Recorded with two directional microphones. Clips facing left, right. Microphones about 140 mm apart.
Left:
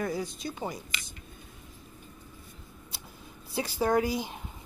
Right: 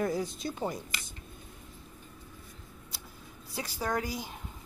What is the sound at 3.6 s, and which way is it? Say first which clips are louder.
Speech: left 7 dB; 25° left (ahead or behind).